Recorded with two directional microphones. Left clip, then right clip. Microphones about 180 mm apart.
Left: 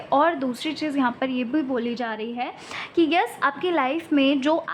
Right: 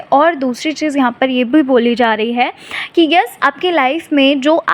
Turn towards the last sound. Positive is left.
turn(degrees=-25)  # may be behind; listen again after turning